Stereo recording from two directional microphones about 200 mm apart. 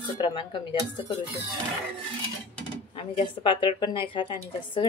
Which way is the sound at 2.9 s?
25° left (ahead or behind).